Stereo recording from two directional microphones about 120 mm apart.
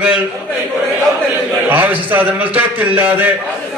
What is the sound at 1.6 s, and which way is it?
A man's voice, 15° right (ahead or behind).